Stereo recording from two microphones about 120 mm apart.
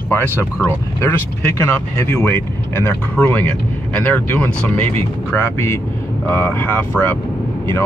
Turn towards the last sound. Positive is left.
turn(degrees=5)  # may be behind; listen again after turning